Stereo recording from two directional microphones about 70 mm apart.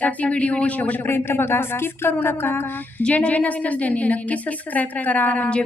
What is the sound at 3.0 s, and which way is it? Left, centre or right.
A woman's voice, centre.